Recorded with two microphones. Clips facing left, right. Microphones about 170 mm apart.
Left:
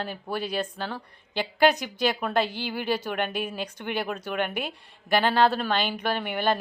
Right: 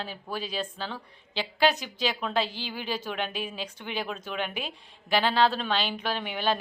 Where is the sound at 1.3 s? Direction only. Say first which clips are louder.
Left 3 dB; 55° left (ahead or behind).